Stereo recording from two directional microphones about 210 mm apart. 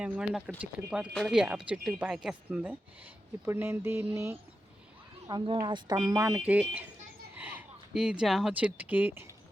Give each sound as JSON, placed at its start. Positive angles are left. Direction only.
{"t": 0.0, "sound": "speech", "side_deg": -5}